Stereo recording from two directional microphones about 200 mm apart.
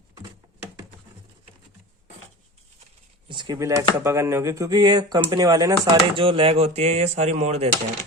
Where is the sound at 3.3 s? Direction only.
20° right (ahead or behind).